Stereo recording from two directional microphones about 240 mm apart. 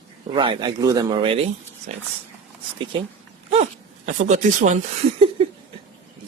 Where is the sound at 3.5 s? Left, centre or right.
Right.